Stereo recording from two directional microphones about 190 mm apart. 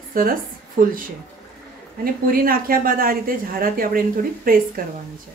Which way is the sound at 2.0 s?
50° right (ahead or behind).